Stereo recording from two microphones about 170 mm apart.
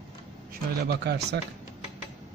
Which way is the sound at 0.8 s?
70° right (ahead or behind).